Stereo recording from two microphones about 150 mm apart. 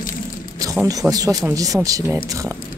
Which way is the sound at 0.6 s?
25° right (ahead or behind).